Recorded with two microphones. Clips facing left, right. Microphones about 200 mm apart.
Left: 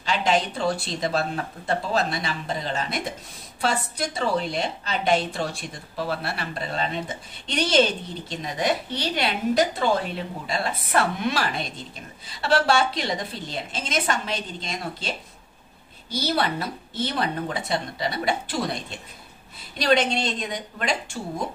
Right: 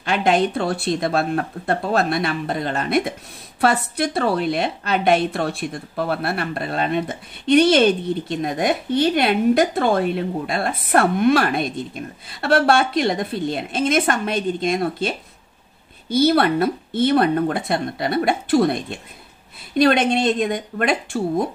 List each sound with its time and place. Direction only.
0.0 s a woman's voice: 55° right (ahead or behind)